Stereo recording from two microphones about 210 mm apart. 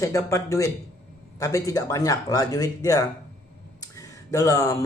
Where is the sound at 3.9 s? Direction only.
15° left (ahead or behind).